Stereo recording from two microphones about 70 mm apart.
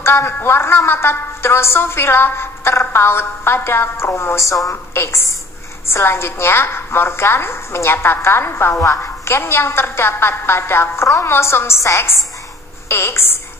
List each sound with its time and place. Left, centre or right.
0.0 s a woman's voice: left